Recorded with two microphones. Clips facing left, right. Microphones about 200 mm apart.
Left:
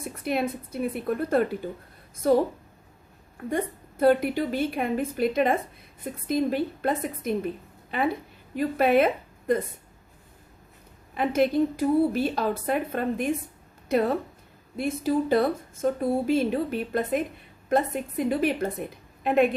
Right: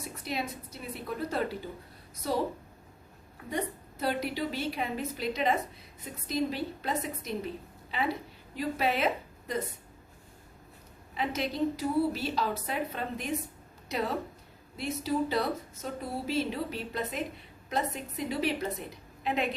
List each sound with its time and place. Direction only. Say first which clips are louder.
0.0 s a woman's voice: left 8 dB; 55° left (ahead or behind)
3.5 s speech: left 5 dB; 50° left (ahead or behind)
11.1 s a woman's voice: left 10 dB; 55° left (ahead or behind)